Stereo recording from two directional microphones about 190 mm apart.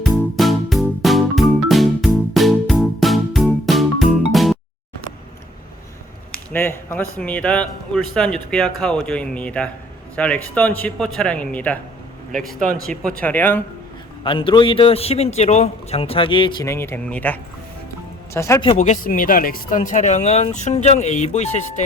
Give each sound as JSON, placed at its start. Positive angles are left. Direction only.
{"t": 0.2, "sound": "music", "side_deg": 0}
{"t": 6.5, "sound": "speech", "side_deg": 10}
{"t": 13.1, "sound": "speech", "side_deg": 10}
{"t": 14.3, "sound": "a man's voice", "side_deg": 25}
{"t": 16.6, "sound": "speech", "side_deg": 15}
{"t": 18.8, "sound": "speech", "side_deg": 40}